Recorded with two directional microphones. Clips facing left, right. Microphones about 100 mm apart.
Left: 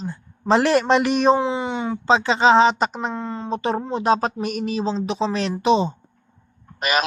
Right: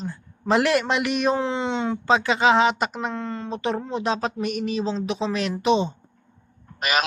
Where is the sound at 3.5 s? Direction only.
35° left (ahead or behind).